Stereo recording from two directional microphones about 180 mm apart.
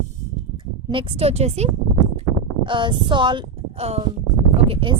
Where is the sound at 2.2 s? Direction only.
25° right (ahead or behind).